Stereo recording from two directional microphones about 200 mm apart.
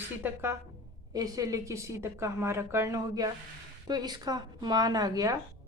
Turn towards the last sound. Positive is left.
turn(degrees=-20)  # may be behind; listen again after turning